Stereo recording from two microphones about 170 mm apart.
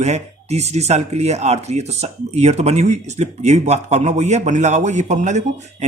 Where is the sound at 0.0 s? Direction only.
40° right (ahead or behind).